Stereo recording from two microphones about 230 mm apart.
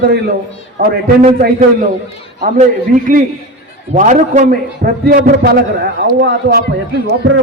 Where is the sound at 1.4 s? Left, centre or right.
Right.